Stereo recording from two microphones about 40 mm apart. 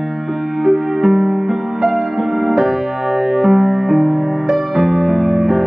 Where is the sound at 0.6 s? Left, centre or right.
Centre.